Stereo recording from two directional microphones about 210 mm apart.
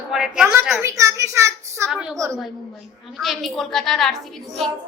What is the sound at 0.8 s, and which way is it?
A child's voice, 15° right (ahead or behind).